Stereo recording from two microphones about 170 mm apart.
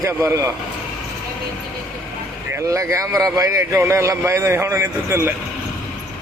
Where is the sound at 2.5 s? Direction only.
20° right (ahead or behind).